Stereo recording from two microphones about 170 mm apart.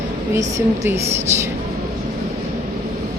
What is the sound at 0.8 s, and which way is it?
Speech, 15° right (ahead or behind).